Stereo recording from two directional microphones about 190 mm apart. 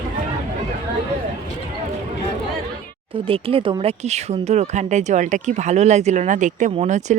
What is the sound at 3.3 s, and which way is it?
Speech, 30° right (ahead or behind).